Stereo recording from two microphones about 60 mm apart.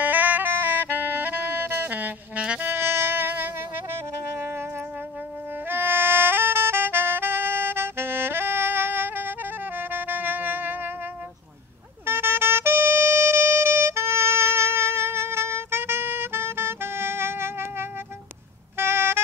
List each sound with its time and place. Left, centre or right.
0.0 s music: right
2.6 s music: right
5.7 s music: right
12.1 s music: right